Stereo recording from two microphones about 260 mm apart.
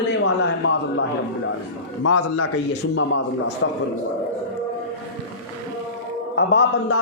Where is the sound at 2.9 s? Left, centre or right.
Left.